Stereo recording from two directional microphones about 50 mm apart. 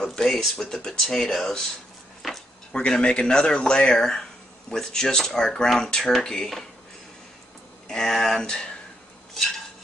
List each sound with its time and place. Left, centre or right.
0.0 s speech: centre
2.7 s speech: centre
7.9 s speech: centre
9.4 s stir: centre